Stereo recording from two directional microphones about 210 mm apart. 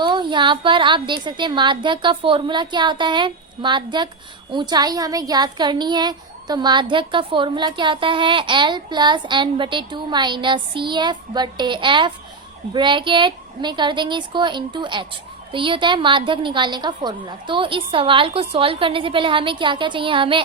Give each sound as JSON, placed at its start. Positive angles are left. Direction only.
{"t": 0.0, "sound": "a woman's voice", "side_deg": -20}